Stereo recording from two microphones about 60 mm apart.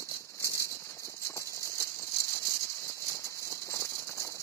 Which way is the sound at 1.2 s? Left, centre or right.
Left.